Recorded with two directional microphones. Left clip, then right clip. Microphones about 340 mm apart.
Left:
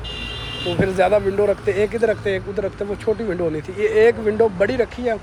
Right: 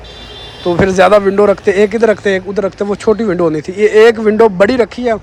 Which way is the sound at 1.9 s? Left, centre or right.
Right.